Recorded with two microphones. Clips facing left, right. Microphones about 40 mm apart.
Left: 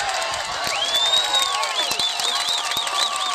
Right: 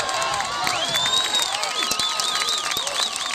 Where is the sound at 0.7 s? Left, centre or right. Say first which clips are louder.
Left 5 dB; centre.